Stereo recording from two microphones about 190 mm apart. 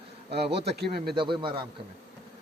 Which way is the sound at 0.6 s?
60° right (ahead or behind).